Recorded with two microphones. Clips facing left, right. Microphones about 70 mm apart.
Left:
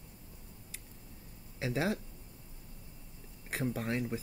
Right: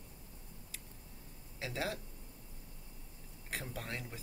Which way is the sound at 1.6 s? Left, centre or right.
Left.